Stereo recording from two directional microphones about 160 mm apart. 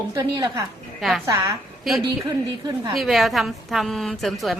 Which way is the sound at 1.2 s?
20° right (ahead or behind).